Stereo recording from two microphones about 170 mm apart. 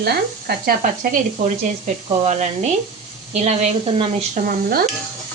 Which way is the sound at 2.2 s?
45° right (ahead or behind).